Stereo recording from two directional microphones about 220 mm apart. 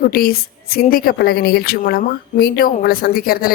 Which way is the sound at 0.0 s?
40° left (ahead or behind).